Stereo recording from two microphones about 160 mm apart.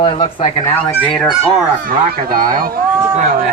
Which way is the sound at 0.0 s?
35° left (ahead or behind).